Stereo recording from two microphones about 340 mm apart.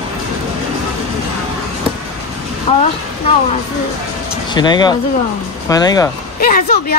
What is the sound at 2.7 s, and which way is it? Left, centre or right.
Speech, centre.